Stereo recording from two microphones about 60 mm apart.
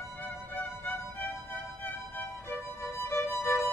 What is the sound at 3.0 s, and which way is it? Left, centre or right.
Music, left.